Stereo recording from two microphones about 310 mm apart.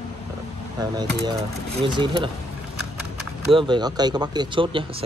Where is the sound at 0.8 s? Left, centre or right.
Centre.